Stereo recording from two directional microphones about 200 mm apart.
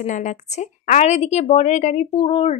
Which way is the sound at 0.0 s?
40° left (ahead or behind).